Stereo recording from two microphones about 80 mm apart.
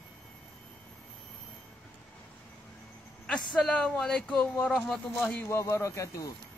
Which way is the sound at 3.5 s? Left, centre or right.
Centre.